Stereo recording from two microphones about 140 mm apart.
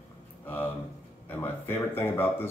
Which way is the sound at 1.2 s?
15° left (ahead or behind).